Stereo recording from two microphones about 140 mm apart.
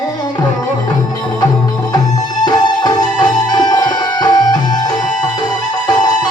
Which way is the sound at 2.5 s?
30° left (ahead or behind).